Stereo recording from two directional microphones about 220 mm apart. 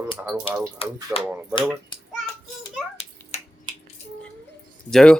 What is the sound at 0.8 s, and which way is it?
Speech, 25° left (ahead or behind).